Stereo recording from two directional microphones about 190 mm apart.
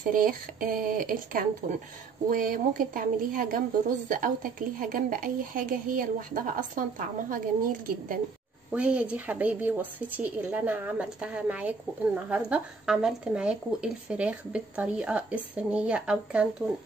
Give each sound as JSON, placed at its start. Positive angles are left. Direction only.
{"t": 0.1, "sound": "a woman's voice", "side_deg": -45}
{"t": 8.7, "sound": "speech", "side_deg": -5}